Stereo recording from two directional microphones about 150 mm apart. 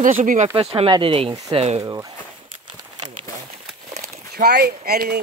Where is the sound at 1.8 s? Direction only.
25° right (ahead or behind).